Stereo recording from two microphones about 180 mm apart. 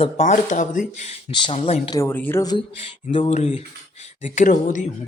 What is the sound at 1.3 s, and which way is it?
Speech, 30° left (ahead or behind).